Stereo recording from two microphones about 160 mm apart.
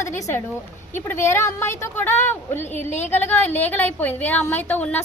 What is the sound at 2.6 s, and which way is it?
Speech, 45° left (ahead or behind).